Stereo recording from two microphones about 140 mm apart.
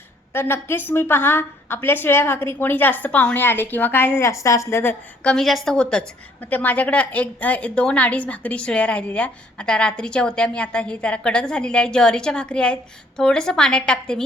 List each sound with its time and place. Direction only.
0.3 s a woman's voice: 15° left (ahead or behind)
5.3 s a woman's voice: centre (ahead or behind)